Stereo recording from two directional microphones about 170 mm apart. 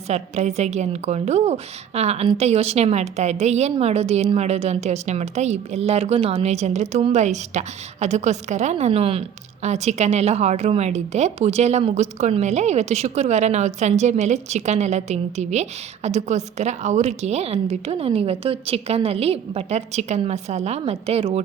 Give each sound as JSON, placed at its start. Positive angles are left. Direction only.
{"t": 0.1, "sound": "a woman's voice", "side_deg": -40}